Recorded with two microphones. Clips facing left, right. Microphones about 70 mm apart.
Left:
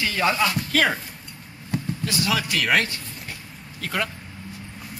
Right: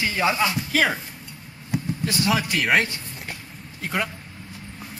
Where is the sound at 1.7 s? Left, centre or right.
Centre.